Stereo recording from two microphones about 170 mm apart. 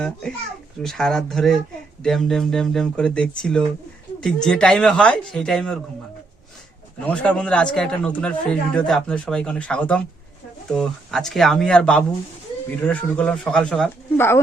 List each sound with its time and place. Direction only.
0.0 s a man's voice: 5° left (ahead or behind)
7.0 s a man's voice: 5° left (ahead or behind)